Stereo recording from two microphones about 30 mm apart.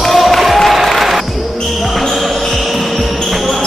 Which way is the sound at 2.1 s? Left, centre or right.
Centre.